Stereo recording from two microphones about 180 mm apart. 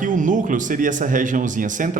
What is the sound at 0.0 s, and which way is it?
A man's voice, 45° right (ahead or behind).